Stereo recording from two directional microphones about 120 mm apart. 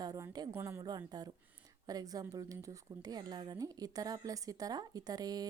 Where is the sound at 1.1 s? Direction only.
35° right (ahead or behind).